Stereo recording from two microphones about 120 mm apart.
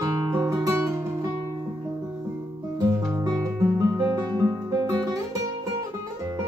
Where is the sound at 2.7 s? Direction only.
25° right (ahead or behind).